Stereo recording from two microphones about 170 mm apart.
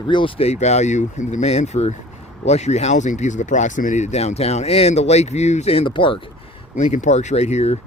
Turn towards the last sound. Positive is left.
turn(degrees=40)  # may be behind; listen again after turning